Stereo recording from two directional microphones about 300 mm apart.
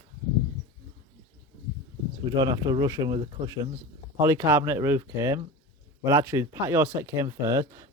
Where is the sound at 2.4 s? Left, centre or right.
Centre.